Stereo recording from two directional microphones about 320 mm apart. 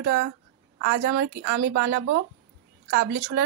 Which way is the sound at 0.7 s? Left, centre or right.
Right.